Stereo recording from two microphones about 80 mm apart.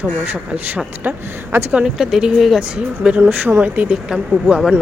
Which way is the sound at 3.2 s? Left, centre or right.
Right.